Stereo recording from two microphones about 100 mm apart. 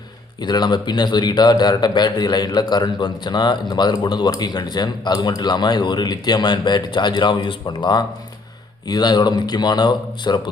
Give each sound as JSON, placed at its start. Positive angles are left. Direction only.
{"t": 0.4, "sound": "a man's voice", "side_deg": 45}